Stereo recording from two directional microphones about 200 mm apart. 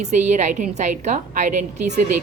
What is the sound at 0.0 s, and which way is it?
A woman's voice, 35° right (ahead or behind).